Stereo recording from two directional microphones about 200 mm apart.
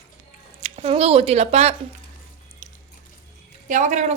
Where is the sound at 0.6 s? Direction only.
30° right (ahead or behind).